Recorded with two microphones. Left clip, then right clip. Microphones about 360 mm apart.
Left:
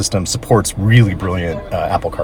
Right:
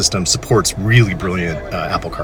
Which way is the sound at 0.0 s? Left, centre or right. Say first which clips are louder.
Right 3 dB; centre.